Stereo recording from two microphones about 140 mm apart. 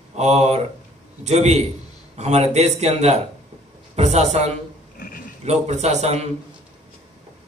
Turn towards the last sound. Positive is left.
turn(degrees=-50)  # may be behind; listen again after turning